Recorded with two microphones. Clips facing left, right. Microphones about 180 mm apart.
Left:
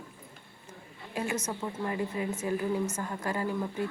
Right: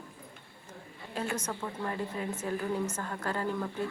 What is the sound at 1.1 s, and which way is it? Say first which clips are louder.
A woman's voice: left 2 dB; 10° left (ahead or behind).